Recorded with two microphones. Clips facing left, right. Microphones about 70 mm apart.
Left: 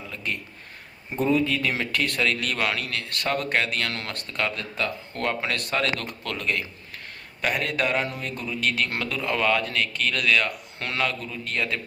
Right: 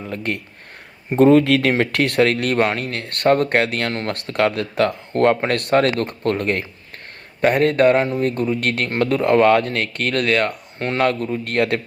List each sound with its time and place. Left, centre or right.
0.1 s speech: right
1.7 s speech: right
4.1 s speech: right
5.1 s speech: right
10.8 s speech: right
11.0 s speech: right